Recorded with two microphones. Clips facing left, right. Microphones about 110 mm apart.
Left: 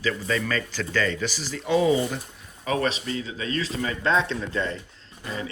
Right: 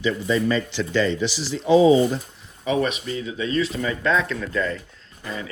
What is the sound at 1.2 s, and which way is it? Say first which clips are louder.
Speech: right 4 dB; 45° left (ahead or behind).